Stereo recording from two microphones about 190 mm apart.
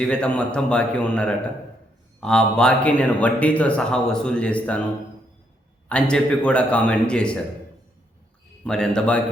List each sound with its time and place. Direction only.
0.0 s a man's voice: 5° left (ahead or behind)
5.9 s a man's voice: 5° left (ahead or behind)
8.6 s a man's voice: 5° left (ahead or behind)